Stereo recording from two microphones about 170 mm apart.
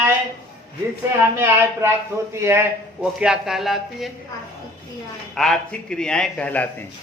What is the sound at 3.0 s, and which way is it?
Speech, 5° right (ahead or behind).